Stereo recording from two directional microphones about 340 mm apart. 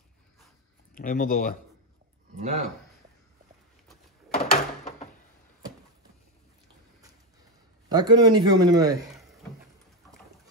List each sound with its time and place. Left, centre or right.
0.9 s speech: left
2.3 s speech: right
4.3 s door: left
7.9 s speech: centre
9.1 s drawer open or close: centre